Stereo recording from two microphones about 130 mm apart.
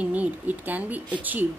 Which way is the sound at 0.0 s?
10° right (ahead or behind).